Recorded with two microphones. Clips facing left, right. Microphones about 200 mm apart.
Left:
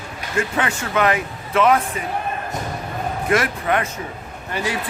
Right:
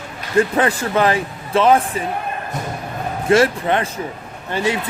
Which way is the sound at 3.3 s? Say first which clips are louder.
Right 6 dB; 30° right (ahead or behind).